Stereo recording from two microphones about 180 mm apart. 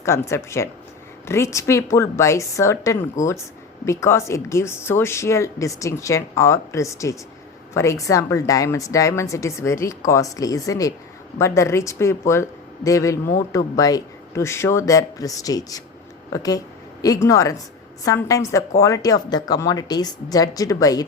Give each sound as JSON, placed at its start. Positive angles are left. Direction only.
{"t": 0.0, "sound": "speech", "side_deg": 15}